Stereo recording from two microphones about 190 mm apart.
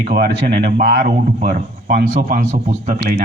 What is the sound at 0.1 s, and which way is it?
Speech, 50° right (ahead or behind).